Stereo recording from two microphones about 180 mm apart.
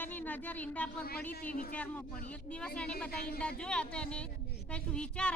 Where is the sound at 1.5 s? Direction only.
50° left (ahead or behind).